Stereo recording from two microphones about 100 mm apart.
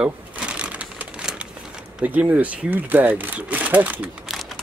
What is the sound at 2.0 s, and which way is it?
Speech, 15° right (ahead or behind).